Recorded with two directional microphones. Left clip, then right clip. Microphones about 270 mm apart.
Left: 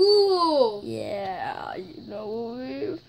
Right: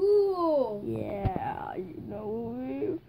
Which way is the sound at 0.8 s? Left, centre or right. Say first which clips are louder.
Left 3 dB; centre.